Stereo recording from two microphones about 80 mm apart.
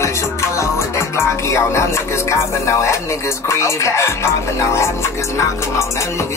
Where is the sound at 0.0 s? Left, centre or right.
Left.